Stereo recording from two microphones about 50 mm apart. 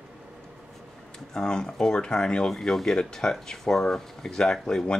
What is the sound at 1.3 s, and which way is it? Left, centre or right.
Speech, centre.